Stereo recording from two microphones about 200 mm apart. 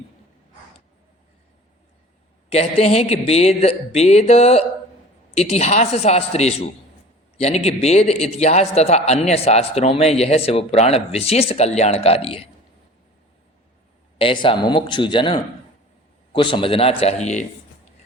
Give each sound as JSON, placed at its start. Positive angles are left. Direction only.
{"t": 2.5, "sound": "a man's voice", "side_deg": 30}
{"t": 14.4, "sound": "a man's voice", "side_deg": 25}